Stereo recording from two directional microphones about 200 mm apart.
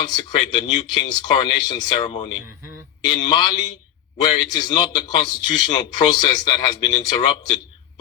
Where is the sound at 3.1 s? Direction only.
20° left (ahead or behind).